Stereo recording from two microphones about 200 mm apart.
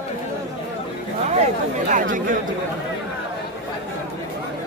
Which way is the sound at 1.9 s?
40° right (ahead or behind).